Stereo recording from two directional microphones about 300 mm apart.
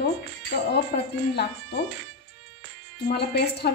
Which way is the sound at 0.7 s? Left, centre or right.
Left.